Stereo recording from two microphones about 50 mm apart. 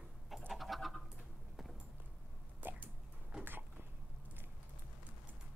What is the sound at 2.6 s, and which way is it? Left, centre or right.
Hiccup, right.